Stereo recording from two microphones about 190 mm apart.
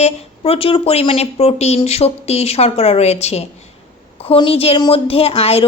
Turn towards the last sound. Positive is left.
turn(degrees=30)  # may be behind; listen again after turning